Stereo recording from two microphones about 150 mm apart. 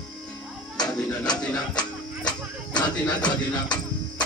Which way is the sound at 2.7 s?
30° left (ahead or behind).